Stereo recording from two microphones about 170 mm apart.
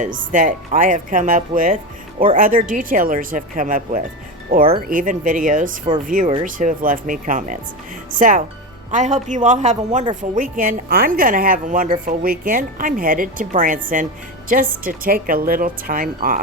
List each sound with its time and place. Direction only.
0.0 s a woman's voice: 50° right (ahead or behind)